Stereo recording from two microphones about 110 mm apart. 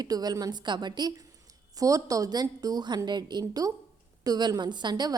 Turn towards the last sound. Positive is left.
turn(degrees=-40)  # may be behind; listen again after turning